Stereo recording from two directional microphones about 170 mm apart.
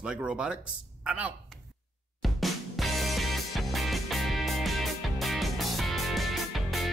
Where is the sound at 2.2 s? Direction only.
Centre (ahead or behind).